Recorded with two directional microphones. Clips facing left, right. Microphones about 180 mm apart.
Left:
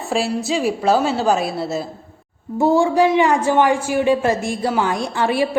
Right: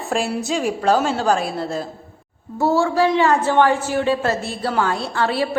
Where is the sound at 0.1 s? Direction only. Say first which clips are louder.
Left 2 dB; centre (ahead or behind).